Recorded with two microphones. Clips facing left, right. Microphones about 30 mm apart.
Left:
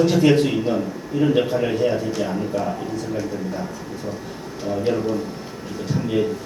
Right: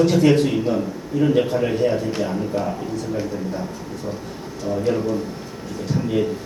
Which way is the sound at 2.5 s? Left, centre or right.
Right.